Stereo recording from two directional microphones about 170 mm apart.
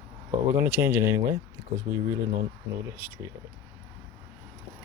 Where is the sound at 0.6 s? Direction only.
15° right (ahead or behind).